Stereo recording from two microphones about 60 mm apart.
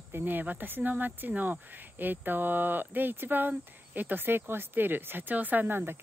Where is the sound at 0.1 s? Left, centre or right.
Right.